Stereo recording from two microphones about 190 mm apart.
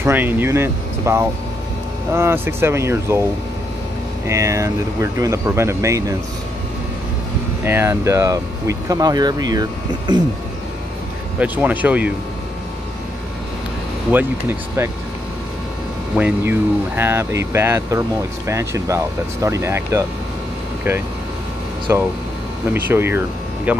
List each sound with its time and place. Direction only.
0.0 s speech: 10° right (ahead or behind)
4.3 s speech: 15° right (ahead or behind)
7.6 s speech: 15° right (ahead or behind)
11.3 s speech: 10° right (ahead or behind)
14.8 s speech: 15° right (ahead or behind)
16.2 s speech: 10° right (ahead or behind)
21.9 s speech: 15° right (ahead or behind)